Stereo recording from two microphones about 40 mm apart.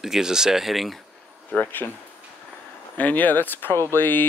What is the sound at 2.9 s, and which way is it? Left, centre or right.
Speech, left.